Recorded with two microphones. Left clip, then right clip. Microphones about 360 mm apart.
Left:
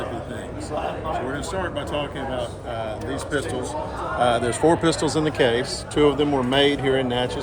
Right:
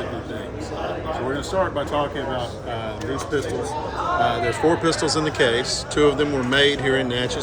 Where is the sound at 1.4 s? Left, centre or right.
Centre.